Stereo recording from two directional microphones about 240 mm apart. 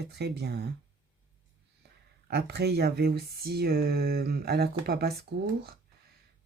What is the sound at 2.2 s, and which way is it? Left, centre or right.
Speech, right.